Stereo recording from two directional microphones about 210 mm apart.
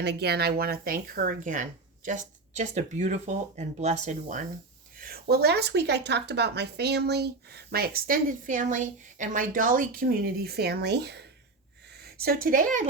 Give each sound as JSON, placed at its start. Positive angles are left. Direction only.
{"t": 0.0, "sound": "speech", "side_deg": -50}
{"t": 4.9, "sound": "speech", "side_deg": -45}